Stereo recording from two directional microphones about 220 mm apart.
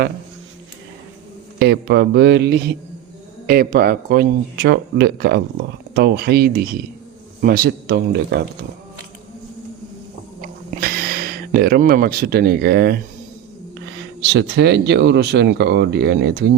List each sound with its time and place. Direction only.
1.5 s speech: 50° right (ahead or behind)
10.4 s a sound: 40° right (ahead or behind)
14.2 s speech: 50° right (ahead or behind)